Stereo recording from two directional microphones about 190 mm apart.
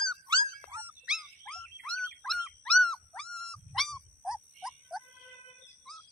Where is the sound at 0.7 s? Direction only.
10° right (ahead or behind).